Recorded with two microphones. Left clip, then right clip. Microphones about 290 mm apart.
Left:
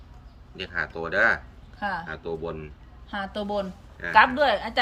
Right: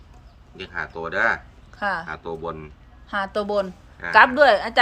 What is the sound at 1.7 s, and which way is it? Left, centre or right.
Speech, centre.